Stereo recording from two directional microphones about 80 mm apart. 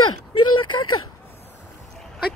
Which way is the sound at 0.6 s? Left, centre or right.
Left.